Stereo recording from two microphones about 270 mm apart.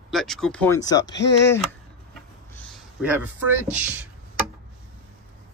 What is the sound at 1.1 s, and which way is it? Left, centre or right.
Speech, left.